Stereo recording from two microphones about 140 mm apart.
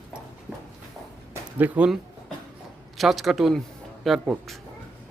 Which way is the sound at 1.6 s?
10° right (ahead or behind).